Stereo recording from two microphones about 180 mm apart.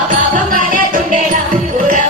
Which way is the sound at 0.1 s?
45° right (ahead or behind).